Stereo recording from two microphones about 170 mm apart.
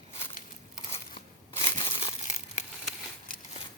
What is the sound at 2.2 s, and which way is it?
Crumpling, 45° left (ahead or behind).